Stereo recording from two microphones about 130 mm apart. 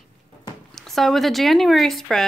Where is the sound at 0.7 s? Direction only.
Centre (ahead or behind).